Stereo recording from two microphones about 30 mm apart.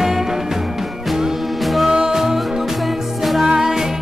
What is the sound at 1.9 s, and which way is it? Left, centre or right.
Music, centre.